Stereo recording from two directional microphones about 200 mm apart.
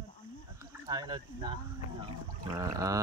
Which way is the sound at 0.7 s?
15° right (ahead or behind).